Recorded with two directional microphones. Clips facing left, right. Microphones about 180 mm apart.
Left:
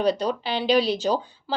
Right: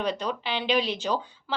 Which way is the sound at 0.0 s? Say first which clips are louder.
Left 6 dB; 40° left (ahead or behind).